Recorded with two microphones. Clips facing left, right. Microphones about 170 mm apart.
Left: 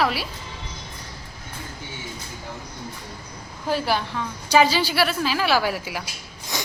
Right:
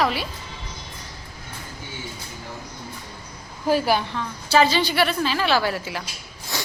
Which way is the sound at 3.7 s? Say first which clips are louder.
Right 3 dB; 5° right (ahead or behind).